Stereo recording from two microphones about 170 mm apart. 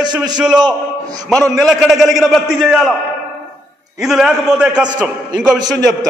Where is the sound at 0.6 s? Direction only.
20° right (ahead or behind).